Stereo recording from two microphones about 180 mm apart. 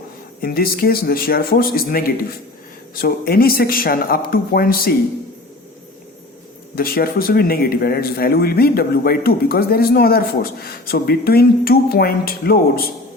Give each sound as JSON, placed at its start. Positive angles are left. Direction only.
{"t": 0.4, "sound": "speech", "side_deg": 55}
{"t": 6.7, "sound": "speech", "side_deg": 55}